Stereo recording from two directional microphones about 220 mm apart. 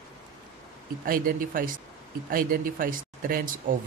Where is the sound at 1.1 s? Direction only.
40° right (ahead or behind).